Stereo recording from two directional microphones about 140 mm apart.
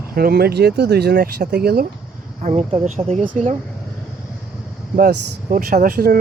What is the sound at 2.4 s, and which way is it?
Speech, 55° right (ahead or behind).